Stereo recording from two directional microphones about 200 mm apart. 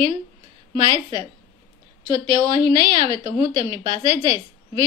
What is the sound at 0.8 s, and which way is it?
A woman's voice, 25° right (ahead or behind).